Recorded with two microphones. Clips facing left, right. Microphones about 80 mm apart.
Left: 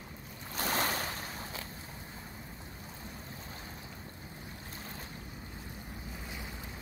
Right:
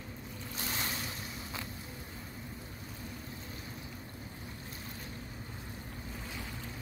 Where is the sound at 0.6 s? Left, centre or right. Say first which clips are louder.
Left 7 dB; left.